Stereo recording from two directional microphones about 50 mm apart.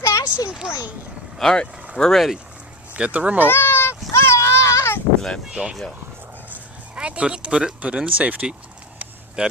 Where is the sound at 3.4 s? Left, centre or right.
Left.